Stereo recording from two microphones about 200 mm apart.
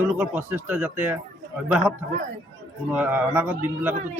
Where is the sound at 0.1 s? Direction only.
10° right (ahead or behind).